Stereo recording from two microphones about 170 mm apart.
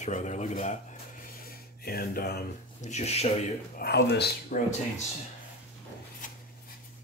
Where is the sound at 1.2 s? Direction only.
60° left (ahead or behind).